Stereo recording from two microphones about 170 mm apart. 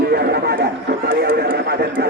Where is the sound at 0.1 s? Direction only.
70° right (ahead or behind).